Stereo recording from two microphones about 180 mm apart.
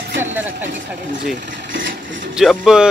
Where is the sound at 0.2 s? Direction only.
10° right (ahead or behind).